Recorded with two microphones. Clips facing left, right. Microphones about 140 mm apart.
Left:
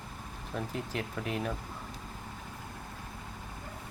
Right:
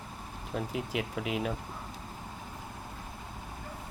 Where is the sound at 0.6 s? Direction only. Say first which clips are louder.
Right 2 dB; 10° right (ahead or behind).